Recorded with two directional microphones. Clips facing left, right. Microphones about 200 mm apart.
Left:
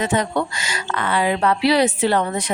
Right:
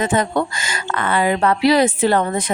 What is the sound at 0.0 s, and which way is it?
Speech, 50° right (ahead or behind).